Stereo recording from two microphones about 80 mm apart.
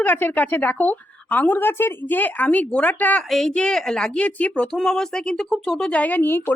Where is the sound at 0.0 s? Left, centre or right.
Left.